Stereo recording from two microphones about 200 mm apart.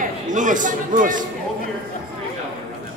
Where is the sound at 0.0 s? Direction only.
40° right (ahead or behind).